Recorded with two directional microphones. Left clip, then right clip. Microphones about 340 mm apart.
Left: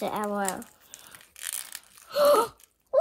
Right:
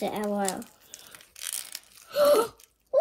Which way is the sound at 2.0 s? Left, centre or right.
Centre.